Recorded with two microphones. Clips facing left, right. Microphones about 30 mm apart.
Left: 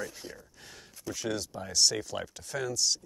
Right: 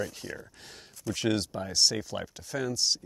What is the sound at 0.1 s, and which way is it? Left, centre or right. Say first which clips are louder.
Speech: right 5 dB; right.